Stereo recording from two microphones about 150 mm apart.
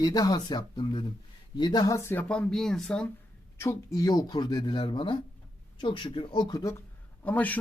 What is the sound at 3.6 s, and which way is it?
Speech, 20° left (ahead or behind).